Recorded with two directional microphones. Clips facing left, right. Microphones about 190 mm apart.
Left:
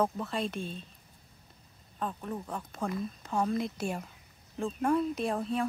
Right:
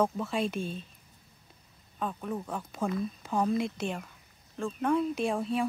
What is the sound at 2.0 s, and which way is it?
Speech, centre (ahead or behind).